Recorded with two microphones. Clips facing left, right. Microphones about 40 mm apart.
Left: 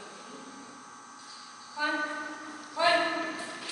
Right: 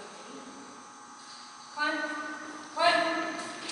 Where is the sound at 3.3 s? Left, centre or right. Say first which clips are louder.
Even; centre.